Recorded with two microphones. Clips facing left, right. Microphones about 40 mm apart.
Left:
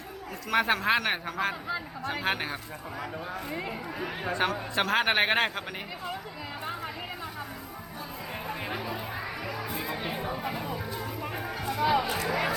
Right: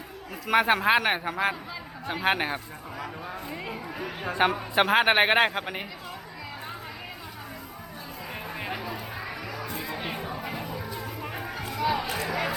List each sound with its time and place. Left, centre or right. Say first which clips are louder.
0.4 s a man's voice: right 4 dB; centre
3.5 s speech: left 1 dB; centre
4.4 s a man's voice: right 6 dB; right
8.6 s music: even; centre
11.8 s speech: left 1 dB; centre